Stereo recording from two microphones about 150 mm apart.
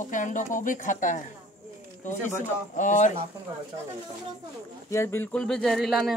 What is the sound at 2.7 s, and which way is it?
Speech, 55° left (ahead or behind).